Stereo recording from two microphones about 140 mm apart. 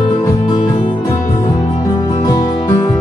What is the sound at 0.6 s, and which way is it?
Music, 35° left (ahead or behind).